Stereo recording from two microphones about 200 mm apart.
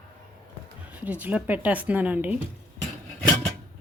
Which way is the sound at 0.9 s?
10° right (ahead or behind).